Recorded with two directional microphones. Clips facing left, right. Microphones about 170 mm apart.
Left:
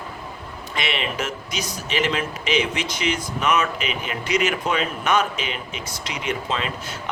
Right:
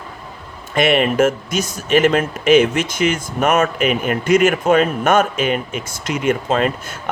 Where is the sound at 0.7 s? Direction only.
50° right (ahead or behind).